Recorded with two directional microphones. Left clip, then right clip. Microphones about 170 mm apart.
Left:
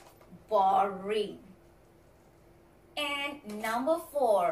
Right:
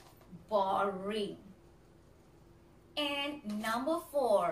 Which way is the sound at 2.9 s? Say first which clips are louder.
Left 2 dB; 15° right (ahead or behind).